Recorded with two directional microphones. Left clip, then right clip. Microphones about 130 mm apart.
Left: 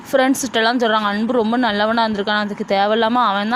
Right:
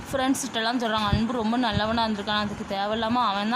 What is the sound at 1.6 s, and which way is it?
A man's voice, 40° left (ahead or behind).